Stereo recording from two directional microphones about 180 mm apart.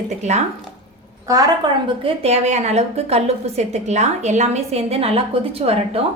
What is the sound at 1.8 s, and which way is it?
A woman's voice, 35° right (ahead or behind).